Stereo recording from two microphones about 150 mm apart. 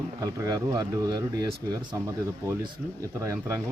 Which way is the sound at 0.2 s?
25° right (ahead or behind).